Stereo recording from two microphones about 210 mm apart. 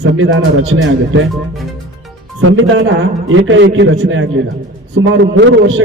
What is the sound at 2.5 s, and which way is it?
A man's voice, 70° right (ahead or behind).